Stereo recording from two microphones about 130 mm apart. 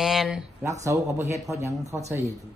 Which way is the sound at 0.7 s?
25° right (ahead or behind).